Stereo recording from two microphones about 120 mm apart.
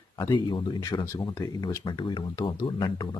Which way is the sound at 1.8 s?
40° left (ahead or behind).